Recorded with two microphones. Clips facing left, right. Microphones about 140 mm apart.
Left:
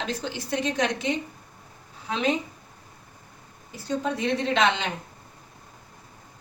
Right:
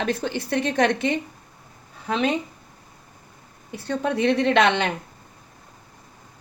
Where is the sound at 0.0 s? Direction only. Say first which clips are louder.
Right 6 dB; 55° right (ahead or behind).